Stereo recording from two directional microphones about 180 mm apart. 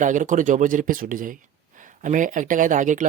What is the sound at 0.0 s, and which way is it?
Speech, 45° right (ahead or behind).